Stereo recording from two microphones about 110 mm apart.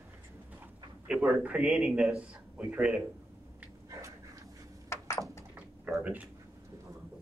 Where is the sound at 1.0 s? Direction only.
10° right (ahead or behind).